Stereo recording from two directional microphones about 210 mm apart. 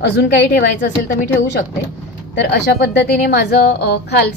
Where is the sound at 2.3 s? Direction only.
50° left (ahead or behind).